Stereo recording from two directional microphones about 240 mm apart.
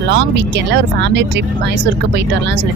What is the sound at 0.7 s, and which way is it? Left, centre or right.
Speech, right.